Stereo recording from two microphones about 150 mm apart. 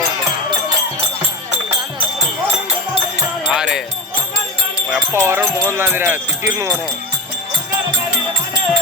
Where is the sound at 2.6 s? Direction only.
45° right (ahead or behind).